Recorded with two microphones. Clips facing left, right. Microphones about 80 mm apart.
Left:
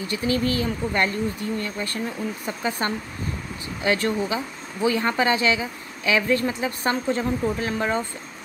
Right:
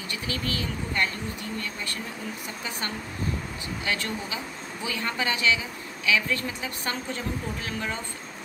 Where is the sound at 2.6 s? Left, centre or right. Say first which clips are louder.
Left 8 dB; left.